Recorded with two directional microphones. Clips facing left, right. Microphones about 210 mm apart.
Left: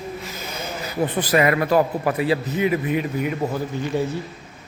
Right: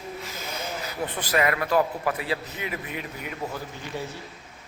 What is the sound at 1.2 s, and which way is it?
Speech, 10° left (ahead or behind).